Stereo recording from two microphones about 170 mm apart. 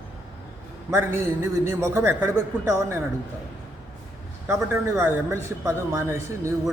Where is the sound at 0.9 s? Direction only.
15° right (ahead or behind).